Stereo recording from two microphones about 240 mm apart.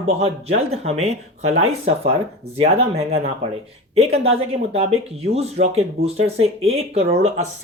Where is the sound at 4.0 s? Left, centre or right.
Right.